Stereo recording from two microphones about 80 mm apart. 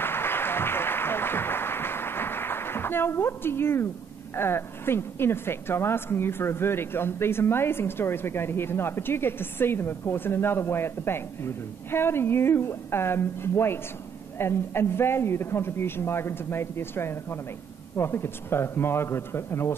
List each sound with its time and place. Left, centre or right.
0.0 s applause: left
4.4 s a woman's voice: left